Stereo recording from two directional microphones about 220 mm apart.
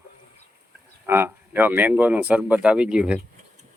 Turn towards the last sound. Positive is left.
turn(degrees=-5)  # may be behind; listen again after turning